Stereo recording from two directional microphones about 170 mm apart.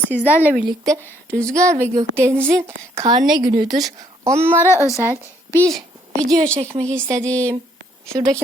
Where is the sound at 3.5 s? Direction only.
25° right (ahead or behind).